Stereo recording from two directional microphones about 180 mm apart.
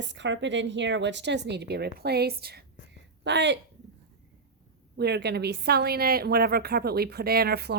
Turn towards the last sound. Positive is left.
turn(degrees=-60)  # may be behind; listen again after turning